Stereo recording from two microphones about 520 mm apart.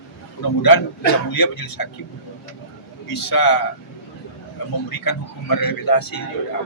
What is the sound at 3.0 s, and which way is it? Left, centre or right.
Speech, left.